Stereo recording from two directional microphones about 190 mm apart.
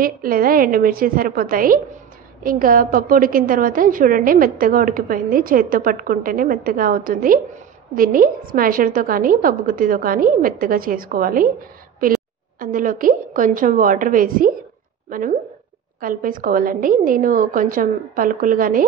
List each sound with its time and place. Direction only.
0.0 s a woman's voice: 50° right (ahead or behind)
12.5 s a woman's voice: 45° right (ahead or behind)